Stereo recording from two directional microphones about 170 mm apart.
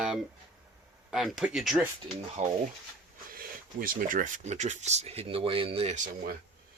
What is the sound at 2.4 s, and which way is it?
Speech, 45° right (ahead or behind).